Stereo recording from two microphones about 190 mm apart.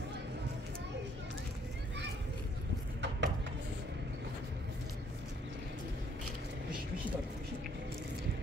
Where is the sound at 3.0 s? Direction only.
70° right (ahead or behind).